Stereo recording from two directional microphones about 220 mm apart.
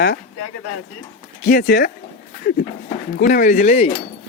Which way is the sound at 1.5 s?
45° left (ahead or behind).